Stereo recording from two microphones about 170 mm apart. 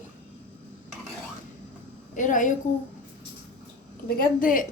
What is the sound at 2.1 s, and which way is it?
Speech, 50° left (ahead or behind).